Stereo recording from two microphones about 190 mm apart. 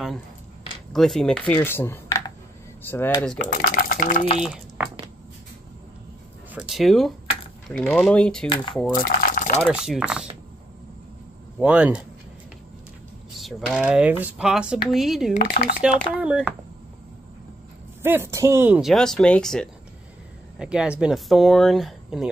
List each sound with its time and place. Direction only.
0.9 s speech: centre (ahead or behind)
3.3 s speech: 45° left (ahead or behind)
6.5 s speech: 5° right (ahead or behind)
9.0 s a sound: 45° left (ahead or behind)
9.7 s speech: 5° right (ahead or behind)
11.6 s speech: 5° right (ahead or behind)
13.4 s speech: centre (ahead or behind)
15.4 s speech: 50° left (ahead or behind)
16.2 s speech: 5° right (ahead or behind)
18.0 s speech: 10° right (ahead or behind)